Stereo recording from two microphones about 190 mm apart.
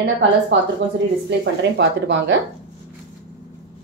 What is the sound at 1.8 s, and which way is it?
Speech, 70° right (ahead or behind).